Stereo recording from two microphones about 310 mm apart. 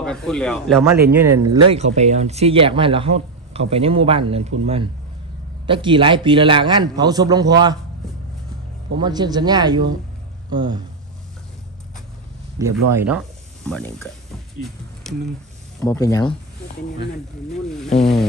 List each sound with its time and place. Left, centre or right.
0.0 s a man's voice: centre
2.0 s a man's voice: right
8.9 s a man's voice: centre
12.6 s a man's voice: centre
15.8 s speech: centre
17.5 s speech: centre